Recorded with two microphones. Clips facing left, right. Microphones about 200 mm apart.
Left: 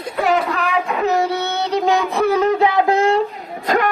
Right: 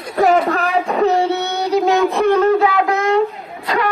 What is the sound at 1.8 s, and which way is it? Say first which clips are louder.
Child singing: right 2 dB; centre (ahead or behind).